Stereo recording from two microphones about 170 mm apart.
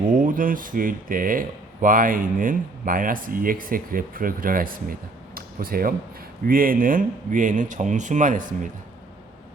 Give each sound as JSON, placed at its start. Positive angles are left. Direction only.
{"t": 0.1, "sound": "speech", "side_deg": -50}